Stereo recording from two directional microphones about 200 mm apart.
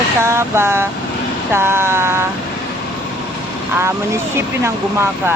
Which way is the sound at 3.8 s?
15° right (ahead or behind).